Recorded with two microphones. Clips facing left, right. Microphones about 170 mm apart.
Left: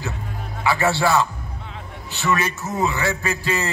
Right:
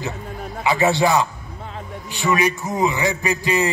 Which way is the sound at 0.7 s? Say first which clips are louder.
Right 2 dB; 20° right (ahead or behind).